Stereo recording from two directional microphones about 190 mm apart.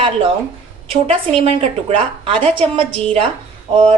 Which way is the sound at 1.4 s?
30° right (ahead or behind).